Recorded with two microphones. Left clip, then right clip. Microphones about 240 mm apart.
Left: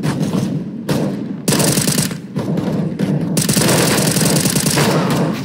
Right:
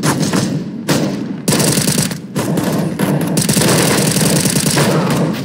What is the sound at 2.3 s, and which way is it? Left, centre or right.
Thump, right.